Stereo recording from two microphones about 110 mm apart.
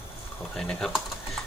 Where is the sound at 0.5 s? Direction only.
5° left (ahead or behind).